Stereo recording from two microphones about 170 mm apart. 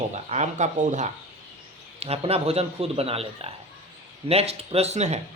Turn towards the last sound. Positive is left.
turn(degrees=-40)  # may be behind; listen again after turning